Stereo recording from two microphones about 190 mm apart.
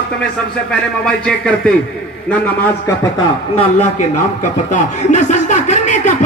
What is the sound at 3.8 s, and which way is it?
A man's voice, 40° left (ahead or behind).